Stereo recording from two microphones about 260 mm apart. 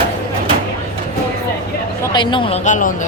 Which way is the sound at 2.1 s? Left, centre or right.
Centre.